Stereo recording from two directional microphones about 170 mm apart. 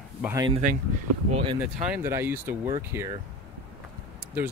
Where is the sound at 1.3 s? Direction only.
30° right (ahead or behind).